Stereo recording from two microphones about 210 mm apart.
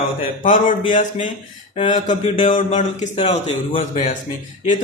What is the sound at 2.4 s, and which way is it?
A man's voice, 35° left (ahead or behind).